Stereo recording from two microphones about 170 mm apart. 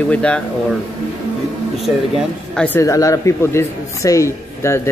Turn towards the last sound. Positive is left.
turn(degrees=15)  # may be behind; listen again after turning